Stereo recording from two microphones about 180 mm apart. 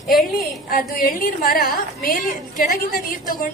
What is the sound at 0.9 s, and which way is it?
A woman's voice, 55° left (ahead or behind).